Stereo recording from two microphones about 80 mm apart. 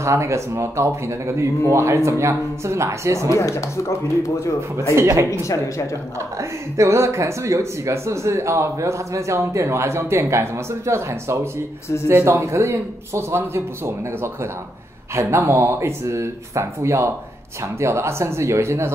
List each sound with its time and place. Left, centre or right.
0.0 s speech: right
3.3 s speech: left
4.9 s speech: right
5.4 s a woman's voice: left
6.8 s speech: right